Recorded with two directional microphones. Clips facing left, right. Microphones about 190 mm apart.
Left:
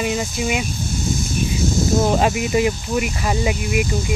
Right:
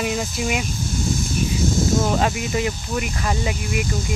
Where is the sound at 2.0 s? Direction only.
20° left (ahead or behind).